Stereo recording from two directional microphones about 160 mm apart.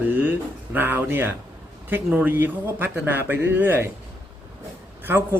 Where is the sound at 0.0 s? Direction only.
10° right (ahead or behind).